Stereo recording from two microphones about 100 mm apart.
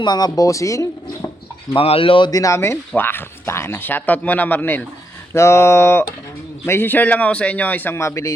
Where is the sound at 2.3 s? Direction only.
35° left (ahead or behind).